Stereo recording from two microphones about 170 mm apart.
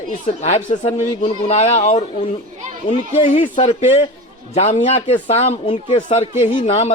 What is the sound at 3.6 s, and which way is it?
Speech, 35° left (ahead or behind).